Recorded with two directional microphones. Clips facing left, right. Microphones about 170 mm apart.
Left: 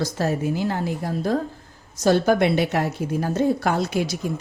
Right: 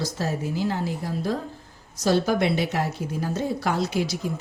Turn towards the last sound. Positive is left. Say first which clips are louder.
# left 2 dB
turn(degrees=55)  # may be behind; listen again after turning